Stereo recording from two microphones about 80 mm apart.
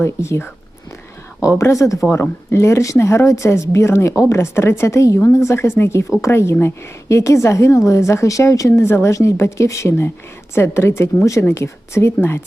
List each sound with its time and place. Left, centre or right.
0.0 s a woman's voice: left
2.0 s a woman's voice: left